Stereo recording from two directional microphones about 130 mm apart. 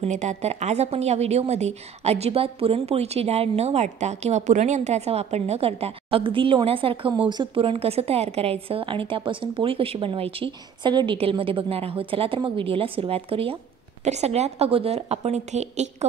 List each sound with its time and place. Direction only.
0.0 s a woman's voice: 65° right (ahead or behind); by 13.6 s 45° right (ahead or behind)
14.0 s a woman's voice: 60° right (ahead or behind)